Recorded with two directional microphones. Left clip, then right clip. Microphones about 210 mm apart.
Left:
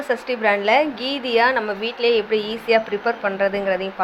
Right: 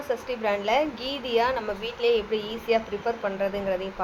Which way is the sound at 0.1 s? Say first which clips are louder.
Left 7 dB; 10° left (ahead or behind).